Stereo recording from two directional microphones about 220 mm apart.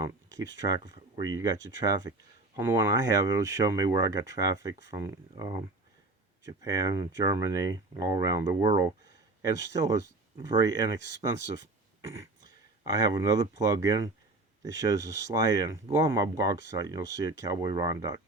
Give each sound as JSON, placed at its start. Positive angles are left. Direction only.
{"t": 0.0, "sound": "speech", "side_deg": -15}